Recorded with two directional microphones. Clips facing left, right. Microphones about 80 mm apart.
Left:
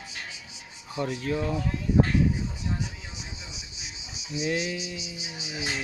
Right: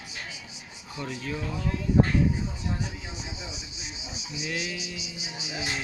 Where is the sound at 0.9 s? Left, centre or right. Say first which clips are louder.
Left 5 dB; left.